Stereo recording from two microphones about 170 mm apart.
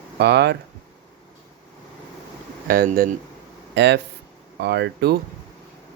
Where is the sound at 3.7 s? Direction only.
90° right.